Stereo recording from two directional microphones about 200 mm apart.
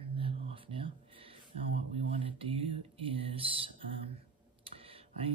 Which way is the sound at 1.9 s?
25° right (ahead or behind).